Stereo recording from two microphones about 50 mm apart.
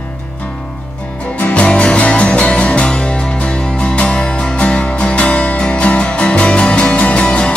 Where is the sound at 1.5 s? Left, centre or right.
Left.